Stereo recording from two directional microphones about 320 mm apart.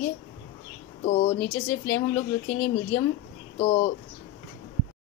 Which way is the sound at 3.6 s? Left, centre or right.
Centre.